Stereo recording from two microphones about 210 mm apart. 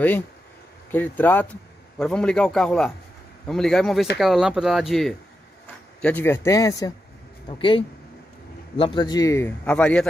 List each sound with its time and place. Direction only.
0.9 s a man's voice: 10° left (ahead or behind)